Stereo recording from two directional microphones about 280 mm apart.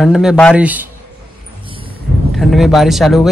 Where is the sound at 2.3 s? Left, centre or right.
Centre.